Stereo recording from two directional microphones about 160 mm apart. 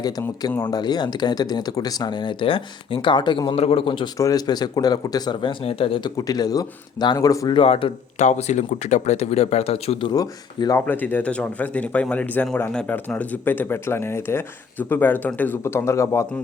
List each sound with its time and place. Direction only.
0.0 s speech: 25° left (ahead or behind)
6.1 s a man's voice: 25° left (ahead or behind); by 10.1 s 40° left (ahead or behind)
10.1 s speech: 25° left (ahead or behind)